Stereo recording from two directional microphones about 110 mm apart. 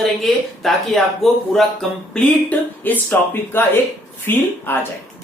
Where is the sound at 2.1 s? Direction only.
15° left (ahead or behind).